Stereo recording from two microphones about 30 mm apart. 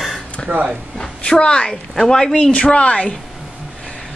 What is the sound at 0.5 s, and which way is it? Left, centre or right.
Speech, right.